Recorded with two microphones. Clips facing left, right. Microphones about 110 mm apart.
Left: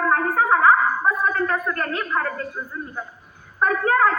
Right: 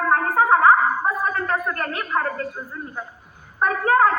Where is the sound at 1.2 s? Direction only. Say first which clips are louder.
Left 1 dB; 35° right (ahead or behind).